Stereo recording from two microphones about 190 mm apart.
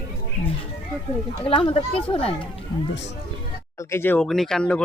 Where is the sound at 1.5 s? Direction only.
25° left (ahead or behind).